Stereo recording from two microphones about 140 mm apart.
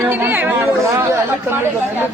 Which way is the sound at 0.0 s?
15° right (ahead or behind).